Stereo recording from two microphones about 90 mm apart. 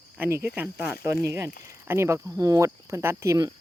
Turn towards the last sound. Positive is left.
turn(degrees=-30)  # may be behind; listen again after turning